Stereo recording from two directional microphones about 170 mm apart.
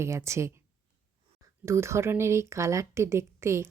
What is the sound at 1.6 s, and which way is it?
Speech, 15° right (ahead or behind).